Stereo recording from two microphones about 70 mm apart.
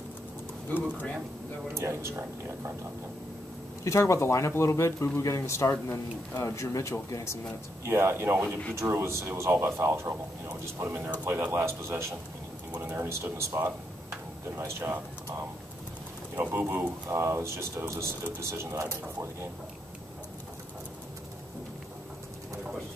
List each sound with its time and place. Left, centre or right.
1.7 s speech: right
3.8 s a man's voice: left
7.8 s speech: right
16.3 s speech: right
17.1 s speech: right